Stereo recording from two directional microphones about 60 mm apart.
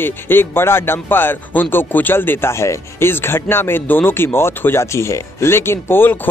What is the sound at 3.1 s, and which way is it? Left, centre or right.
Speech, left.